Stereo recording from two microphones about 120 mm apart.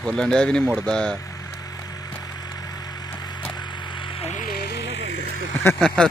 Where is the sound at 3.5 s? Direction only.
35° left (ahead or behind).